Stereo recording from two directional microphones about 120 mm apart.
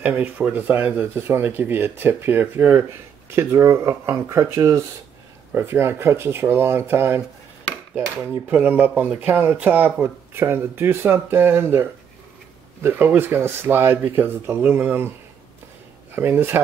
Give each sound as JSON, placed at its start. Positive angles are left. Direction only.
{"t": 0.0, "sound": "speech", "side_deg": -10}
{"t": 8.3, "sound": "speech", "side_deg": -15}
{"t": 16.2, "sound": "speech", "side_deg": -20}